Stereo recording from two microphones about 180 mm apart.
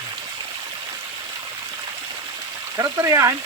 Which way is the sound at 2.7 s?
15° right (ahead or behind).